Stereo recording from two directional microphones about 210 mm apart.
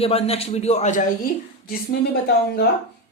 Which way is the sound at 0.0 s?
30° left (ahead or behind).